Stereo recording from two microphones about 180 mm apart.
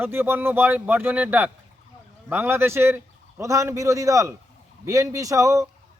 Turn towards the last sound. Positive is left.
turn(degrees=-15)  # may be behind; listen again after turning